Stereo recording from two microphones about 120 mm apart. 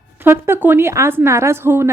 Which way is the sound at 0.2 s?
20° right (ahead or behind).